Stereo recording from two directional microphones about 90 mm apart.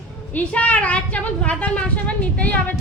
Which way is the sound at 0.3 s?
15° left (ahead or behind).